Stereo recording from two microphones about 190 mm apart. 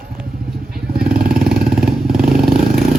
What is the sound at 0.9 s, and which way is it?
Vehicle, 50° right (ahead or behind).